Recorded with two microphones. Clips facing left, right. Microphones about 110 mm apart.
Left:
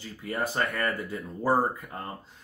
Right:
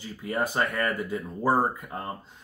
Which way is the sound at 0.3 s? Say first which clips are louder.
Right 2 dB; 20° right (ahead or behind).